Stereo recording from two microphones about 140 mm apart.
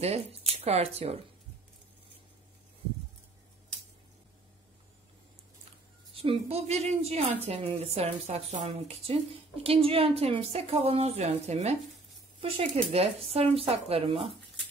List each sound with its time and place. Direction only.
0.0 s speech: 50° right (ahead or behind)
6.1 s a woman's voice: 45° right (ahead or behind)
12.4 s a woman's voice: 40° right (ahead or behind)